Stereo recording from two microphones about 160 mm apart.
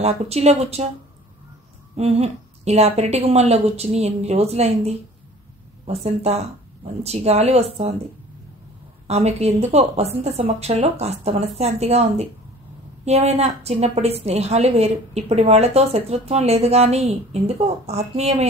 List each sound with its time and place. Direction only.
0.0 s a woman's voice: 40° right (ahead or behind)
2.0 s a woman's voice: 40° right (ahead or behind)
9.0 s a woman's voice: 40° right (ahead or behind)